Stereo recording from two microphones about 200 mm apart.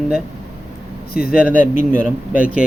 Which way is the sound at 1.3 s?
5° right (ahead or behind).